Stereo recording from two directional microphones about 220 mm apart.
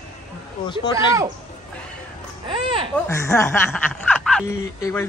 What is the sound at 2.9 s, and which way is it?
A man's voice, 10° left (ahead or behind).